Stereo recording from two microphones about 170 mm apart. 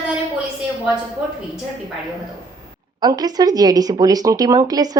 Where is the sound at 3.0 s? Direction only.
25° right (ahead or behind).